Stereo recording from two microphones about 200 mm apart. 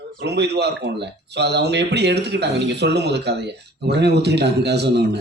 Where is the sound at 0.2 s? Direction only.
55° right (ahead or behind).